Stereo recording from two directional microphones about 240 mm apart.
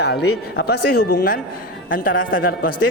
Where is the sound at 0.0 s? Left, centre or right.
Left.